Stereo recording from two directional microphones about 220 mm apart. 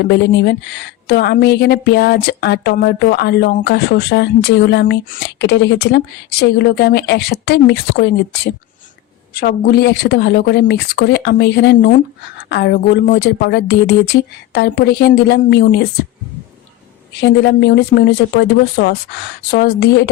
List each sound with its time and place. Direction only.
0.0 s a woman's voice: 50° left (ahead or behind)
17.2 s a woman's voice: 50° left (ahead or behind)